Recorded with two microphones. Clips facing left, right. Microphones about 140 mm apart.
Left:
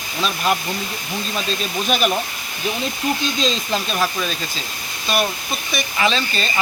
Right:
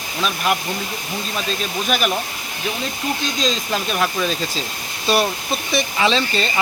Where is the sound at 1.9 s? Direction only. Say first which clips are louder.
Left 1 dB; centre (ahead or behind).